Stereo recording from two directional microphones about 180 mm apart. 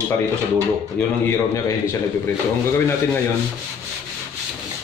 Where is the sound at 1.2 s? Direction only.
15° left (ahead or behind).